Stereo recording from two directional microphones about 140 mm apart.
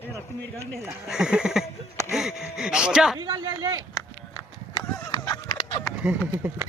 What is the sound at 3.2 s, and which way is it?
Speech, 30° right (ahead or behind).